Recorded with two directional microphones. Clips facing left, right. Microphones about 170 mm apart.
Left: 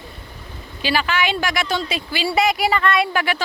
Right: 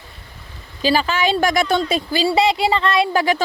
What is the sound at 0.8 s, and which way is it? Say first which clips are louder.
Speech: right 3 dB; 40° right (ahead or behind).